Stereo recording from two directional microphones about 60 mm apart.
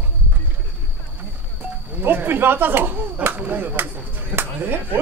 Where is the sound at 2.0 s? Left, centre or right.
Right.